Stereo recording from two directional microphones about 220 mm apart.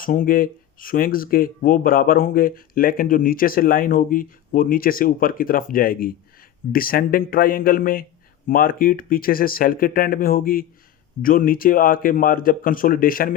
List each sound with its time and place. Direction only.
0.0 s speech: 40° left (ahead or behind)